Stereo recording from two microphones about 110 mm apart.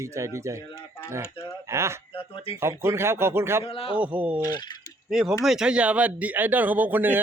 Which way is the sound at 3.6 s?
60° left (ahead or behind).